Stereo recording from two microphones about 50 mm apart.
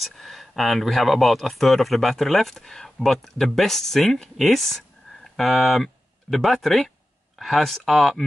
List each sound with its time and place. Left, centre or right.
0.0 s speech: centre